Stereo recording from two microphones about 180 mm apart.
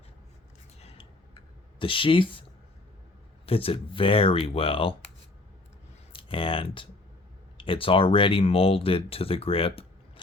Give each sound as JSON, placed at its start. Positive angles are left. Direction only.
{"t": 0.8, "sound": "scissors", "side_deg": 30}
{"t": 1.8, "sound": "speech", "side_deg": 30}
{"t": 3.4, "sound": "speech", "side_deg": 30}
{"t": 6.1, "sound": "speech", "side_deg": 30}